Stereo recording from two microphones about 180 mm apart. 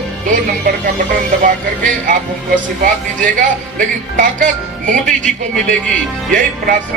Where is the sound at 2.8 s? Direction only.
45° right (ahead or behind).